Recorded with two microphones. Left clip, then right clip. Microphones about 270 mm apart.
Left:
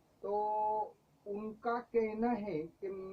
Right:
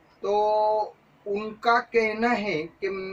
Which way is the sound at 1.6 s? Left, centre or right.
Centre.